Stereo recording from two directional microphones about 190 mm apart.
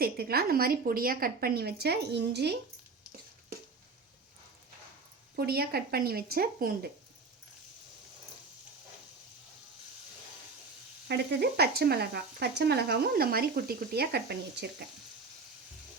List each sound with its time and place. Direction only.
0.0 s speech: 55° right (ahead or behind)
5.4 s speech: 55° right (ahead or behind)
11.1 s speech: 60° right (ahead or behind)